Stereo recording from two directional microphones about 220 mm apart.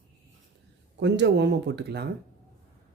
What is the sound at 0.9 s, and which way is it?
Speech, 55° right (ahead or behind).